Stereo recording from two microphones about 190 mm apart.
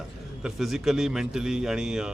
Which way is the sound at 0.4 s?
Centre (ahead or behind).